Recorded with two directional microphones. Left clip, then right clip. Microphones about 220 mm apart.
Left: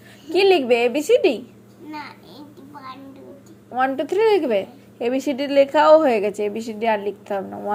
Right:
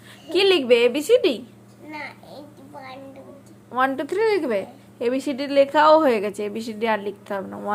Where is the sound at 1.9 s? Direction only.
20° right (ahead or behind).